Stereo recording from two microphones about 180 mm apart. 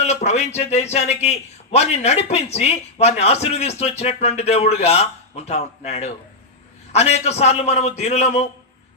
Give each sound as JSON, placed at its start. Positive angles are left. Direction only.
{"t": 0.0, "sound": "a man's voice", "side_deg": 35}